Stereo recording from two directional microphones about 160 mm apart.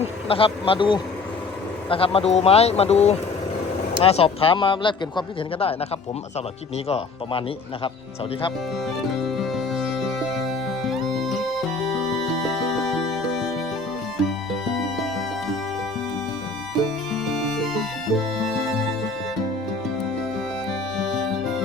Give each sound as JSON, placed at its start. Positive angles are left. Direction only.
{"t": 0.0, "sound": "speech", "side_deg": 35}
{"t": 6.8, "sound": "speech", "side_deg": 35}
{"t": 9.2, "sound": "music", "side_deg": 0}
{"t": 16.8, "sound": "music", "side_deg": 0}
{"t": 21.1, "sound": "music", "side_deg": 0}